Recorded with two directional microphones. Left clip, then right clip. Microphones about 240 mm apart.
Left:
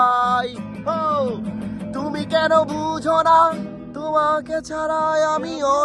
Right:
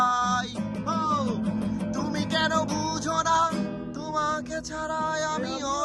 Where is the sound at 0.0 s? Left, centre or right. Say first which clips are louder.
Left 7 dB; centre.